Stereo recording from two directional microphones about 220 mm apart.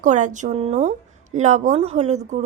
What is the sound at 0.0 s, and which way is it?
Speech, 35° right (ahead or behind).